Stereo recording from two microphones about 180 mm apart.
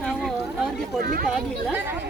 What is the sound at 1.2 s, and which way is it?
Speech, 5° right (ahead or behind).